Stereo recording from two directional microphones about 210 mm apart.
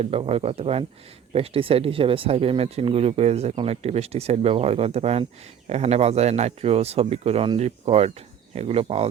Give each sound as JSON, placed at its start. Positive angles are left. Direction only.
{"t": 0.0, "sound": "speech", "side_deg": -30}